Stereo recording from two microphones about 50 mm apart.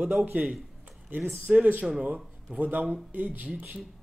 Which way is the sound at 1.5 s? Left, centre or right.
Centre.